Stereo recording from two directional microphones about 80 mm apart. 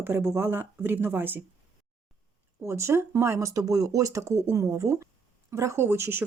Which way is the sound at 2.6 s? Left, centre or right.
Right.